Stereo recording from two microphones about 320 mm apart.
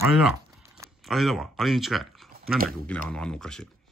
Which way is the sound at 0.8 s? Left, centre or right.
Centre.